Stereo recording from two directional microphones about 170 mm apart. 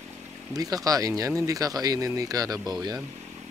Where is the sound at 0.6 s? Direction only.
20° right (ahead or behind).